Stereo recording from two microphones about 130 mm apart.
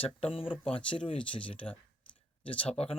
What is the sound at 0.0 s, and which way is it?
Speech, 45° left (ahead or behind).